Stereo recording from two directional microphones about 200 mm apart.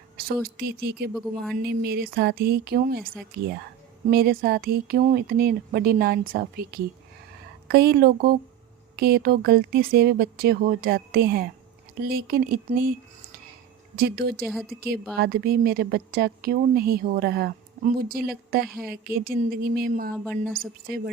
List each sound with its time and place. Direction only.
0.4 s speech: 50° right (ahead or behind)
1.1 s speech: centre (ahead or behind)
1.5 s speech: 50° right (ahead or behind)
4.1 s speech: 50° right (ahead or behind)
7.7 s speech: 55° right (ahead or behind)
13.9 s speech: 50° right (ahead or behind)
14.4 s speech: centre (ahead or behind)
15.2 s speech: 50° right (ahead or behind)
20.1 s speech: 5° left (ahead or behind)
20.5 s speech: 50° right (ahead or behind)